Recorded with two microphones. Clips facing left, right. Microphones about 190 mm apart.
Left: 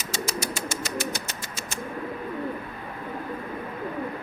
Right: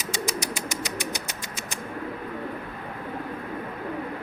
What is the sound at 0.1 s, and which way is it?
Bird, 15° right (ahead or behind).